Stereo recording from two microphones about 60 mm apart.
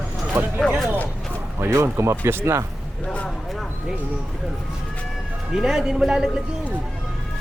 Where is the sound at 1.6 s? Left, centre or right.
Right.